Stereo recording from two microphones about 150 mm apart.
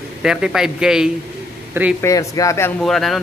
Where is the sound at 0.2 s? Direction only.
5° right (ahead or behind).